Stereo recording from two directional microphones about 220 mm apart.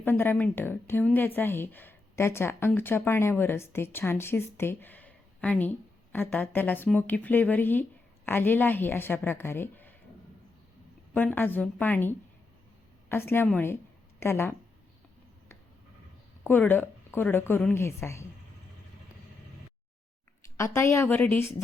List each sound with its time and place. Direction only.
0.0 s a woman's voice: 10° left (ahead or behind)
11.1 s a woman's voice: 10° left (ahead or behind)
16.4 s a woman's voice: 10° left (ahead or behind)
20.6 s a woman's voice: 10° left (ahead or behind)